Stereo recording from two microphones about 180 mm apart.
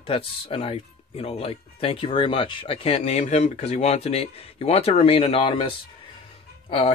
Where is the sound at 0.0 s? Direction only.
30° left (ahead or behind).